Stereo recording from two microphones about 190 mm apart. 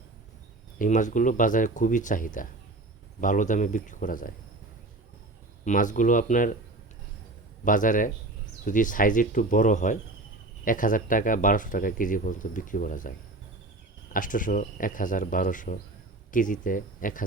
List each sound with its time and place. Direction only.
0.8 s speech: 40° left (ahead or behind)
5.6 s speech: 40° left (ahead or behind)
7.6 s speech: 45° left (ahead or behind)